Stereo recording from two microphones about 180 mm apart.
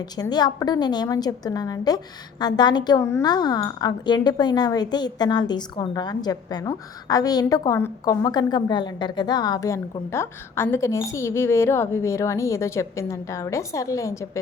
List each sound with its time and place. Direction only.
0.0 s a woman's voice: 20° left (ahead or behind)